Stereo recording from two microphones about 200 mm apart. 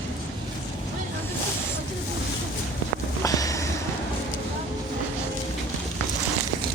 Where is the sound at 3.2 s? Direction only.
15° left (ahead or behind).